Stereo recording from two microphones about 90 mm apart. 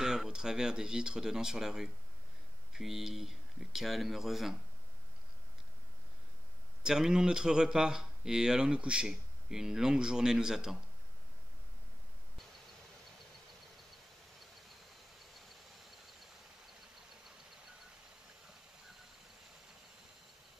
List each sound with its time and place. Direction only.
0.0 s speech: 5° right (ahead or behind)
6.8 s speech: 5° right (ahead or behind)